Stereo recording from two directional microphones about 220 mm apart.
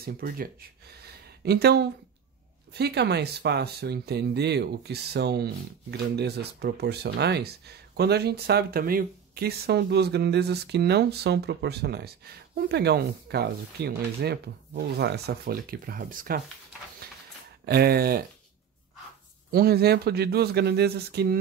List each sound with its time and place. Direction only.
0.0 s speech: 40° right (ahead or behind)
17.6 s speech: 45° right (ahead or behind)
19.5 s speech: 45° right (ahead or behind)